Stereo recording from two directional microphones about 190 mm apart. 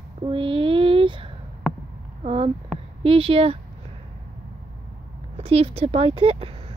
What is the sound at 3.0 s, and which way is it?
Speech, 30° right (ahead or behind).